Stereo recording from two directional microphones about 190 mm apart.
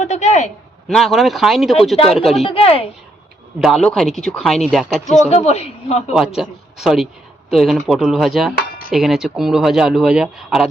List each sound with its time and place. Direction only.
0.0 s a man's voice: 35° left (ahead or behind)
0.9 s speech: centre (ahead or behind)
2.4 s a man's voice: 30° left (ahead or behind)
3.6 s speech: centre (ahead or behind)
5.2 s a man's voice: 35° left (ahead or behind)
6.1 s speech: centre (ahead or behind)